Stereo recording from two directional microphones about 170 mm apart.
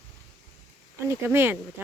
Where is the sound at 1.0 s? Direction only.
15° right (ahead or behind).